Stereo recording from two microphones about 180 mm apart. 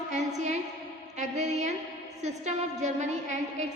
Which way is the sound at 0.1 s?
40° right (ahead or behind).